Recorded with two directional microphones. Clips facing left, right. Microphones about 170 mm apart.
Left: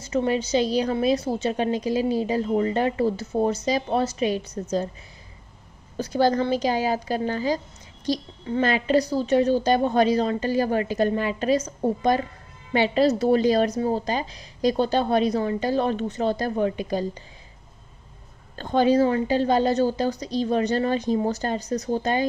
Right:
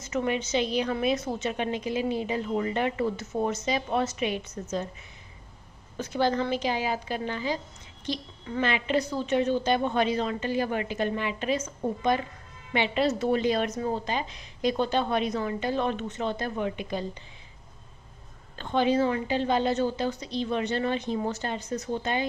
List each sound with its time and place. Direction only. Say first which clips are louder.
0.0 s a woman's voice: left 5 dB; 30° left (ahead or behind)
5.9 s a woman's voice: left 5 dB; 35° left (ahead or behind)
18.6 s a woman's voice: left 5 dB; 40° left (ahead or behind)